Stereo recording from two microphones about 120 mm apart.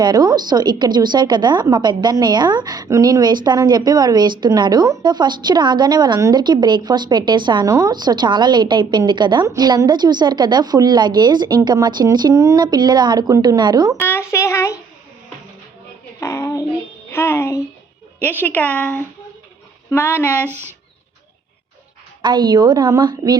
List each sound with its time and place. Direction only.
0.0 s a woman's voice: 35° right (ahead or behind)
12.3 s a woman's voice: 25° right (ahead or behind)
14.0 s a child's voice: 20° left (ahead or behind)
16.2 s child singing: 25° left (ahead or behind)
17.1 s a child's voice: 20° left (ahead or behind)
22.2 s a woman's voice: 40° right (ahead or behind)